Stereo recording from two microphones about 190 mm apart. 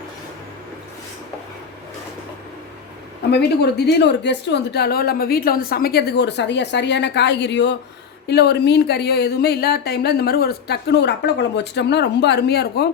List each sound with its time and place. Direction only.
3.3 s speech: 60° left (ahead or behind)